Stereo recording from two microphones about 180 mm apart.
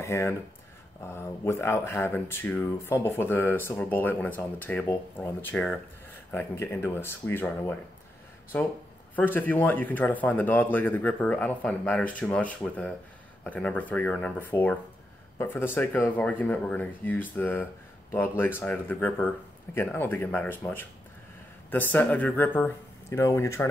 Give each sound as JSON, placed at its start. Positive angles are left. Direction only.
{"t": 0.0, "sound": "speech", "side_deg": 15}